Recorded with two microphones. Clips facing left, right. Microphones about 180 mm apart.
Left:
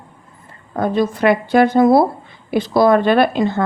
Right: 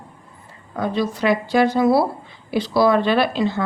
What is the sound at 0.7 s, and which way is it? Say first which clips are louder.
Speech: left 5 dB; 50° left (ahead or behind).